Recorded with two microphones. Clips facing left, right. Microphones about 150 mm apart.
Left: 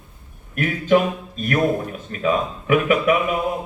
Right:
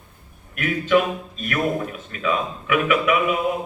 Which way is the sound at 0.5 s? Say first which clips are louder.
Left 2 dB; 40° left (ahead or behind).